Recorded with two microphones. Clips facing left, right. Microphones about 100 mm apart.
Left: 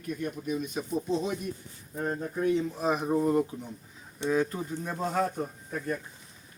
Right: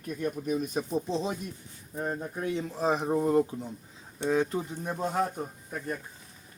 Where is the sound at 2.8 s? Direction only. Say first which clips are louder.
Even; 30° right (ahead or behind).